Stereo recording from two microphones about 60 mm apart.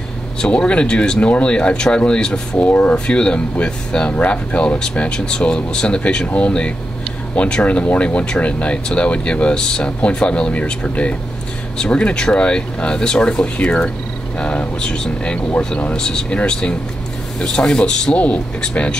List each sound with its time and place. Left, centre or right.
0.4 s speech: centre